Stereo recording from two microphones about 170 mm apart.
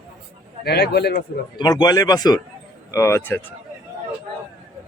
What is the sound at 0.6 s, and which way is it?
Speech, 70° left (ahead or behind).